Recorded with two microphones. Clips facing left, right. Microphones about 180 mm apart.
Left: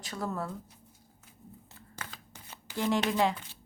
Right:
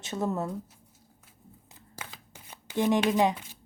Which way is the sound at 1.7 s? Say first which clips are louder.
Right 2 dB; 10° right (ahead or behind).